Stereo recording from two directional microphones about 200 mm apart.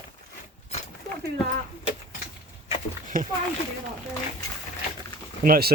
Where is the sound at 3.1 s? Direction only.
45° right (ahead or behind).